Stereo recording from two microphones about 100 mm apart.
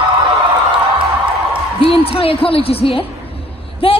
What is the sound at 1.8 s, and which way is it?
A woman's voice, 70° left (ahead or behind).